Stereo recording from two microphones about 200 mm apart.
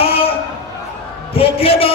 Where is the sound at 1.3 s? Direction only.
30° left (ahead or behind).